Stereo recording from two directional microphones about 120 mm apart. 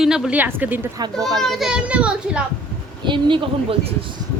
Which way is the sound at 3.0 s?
45° right (ahead or behind).